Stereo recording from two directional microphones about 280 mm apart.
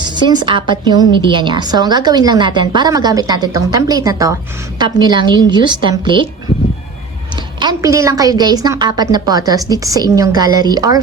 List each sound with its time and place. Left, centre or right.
0.1 s a woman's voice: centre
7.6 s a woman's voice: centre